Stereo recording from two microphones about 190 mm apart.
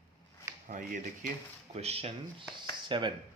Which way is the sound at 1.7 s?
35° right (ahead or behind).